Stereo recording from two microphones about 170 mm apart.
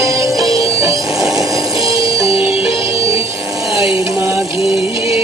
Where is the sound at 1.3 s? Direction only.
20° right (ahead or behind).